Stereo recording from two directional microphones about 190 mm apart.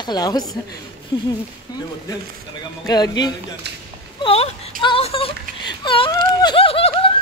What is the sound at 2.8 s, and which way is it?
Speech, 20° left (ahead or behind).